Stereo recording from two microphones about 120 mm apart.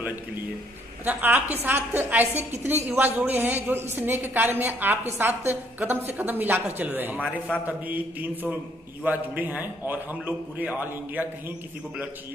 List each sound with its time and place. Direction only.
1.0 s a woman's voice: 15° right (ahead or behind)